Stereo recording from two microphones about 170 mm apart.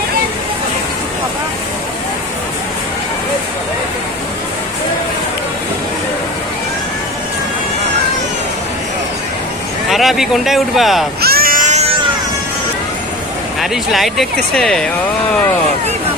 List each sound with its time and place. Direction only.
9.9 s speech: centre (ahead or behind)
11.2 s cat: 65° right (ahead or behind); by 11.9 s 40° right (ahead or behind)
13.6 s speech: centre (ahead or behind)